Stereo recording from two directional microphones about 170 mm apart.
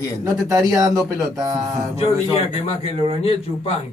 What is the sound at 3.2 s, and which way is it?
Speech, 35° left (ahead or behind).